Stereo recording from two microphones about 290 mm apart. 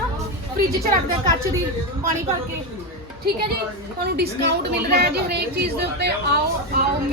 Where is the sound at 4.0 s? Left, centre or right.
Right.